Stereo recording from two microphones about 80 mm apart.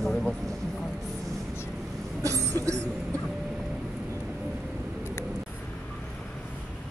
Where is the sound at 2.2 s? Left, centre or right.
Right.